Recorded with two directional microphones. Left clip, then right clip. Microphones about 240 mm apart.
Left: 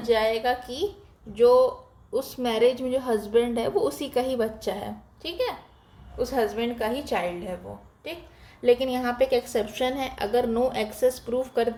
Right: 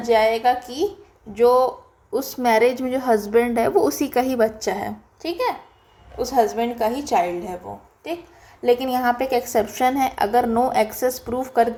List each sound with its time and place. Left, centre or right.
0.0 s a woman's voice: centre
8.6 s a woman's voice: centre